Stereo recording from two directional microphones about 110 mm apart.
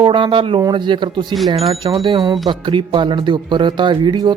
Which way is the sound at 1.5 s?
65° right (ahead or behind).